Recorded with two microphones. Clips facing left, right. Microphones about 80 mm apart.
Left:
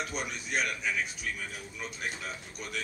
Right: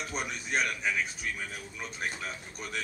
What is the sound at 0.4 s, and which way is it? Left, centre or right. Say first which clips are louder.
Speech: right 2 dB; right.